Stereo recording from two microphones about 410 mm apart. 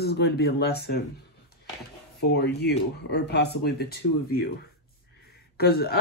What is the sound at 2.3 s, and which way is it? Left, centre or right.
A woman's voice, left.